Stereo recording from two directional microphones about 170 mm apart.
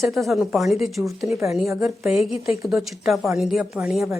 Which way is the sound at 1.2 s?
15° right (ahead or behind).